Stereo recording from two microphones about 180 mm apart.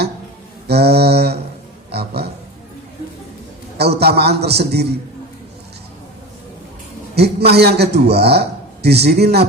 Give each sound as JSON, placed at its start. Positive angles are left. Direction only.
{"t": 0.7, "sound": "a man's voice", "side_deg": -65}
{"t": 1.9, "sound": "a sound", "side_deg": -65}
{"t": 3.8, "sound": "a man's voice", "side_deg": -65}
{"t": 7.2, "sound": "a man's voice", "side_deg": -65}